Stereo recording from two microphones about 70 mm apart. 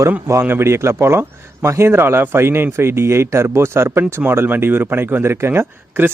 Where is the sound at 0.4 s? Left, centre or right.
Right.